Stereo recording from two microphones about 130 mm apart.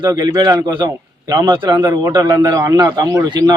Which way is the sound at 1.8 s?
20° right (ahead or behind).